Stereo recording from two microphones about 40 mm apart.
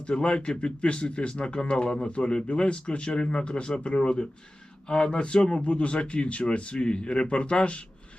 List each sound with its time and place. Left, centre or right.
0.0 s speech: left